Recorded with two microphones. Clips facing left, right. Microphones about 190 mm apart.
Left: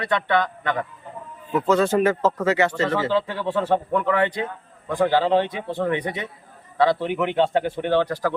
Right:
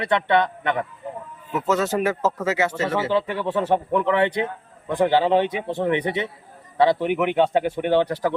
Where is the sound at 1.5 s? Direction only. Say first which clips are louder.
Left 3 dB; 10° right (ahead or behind).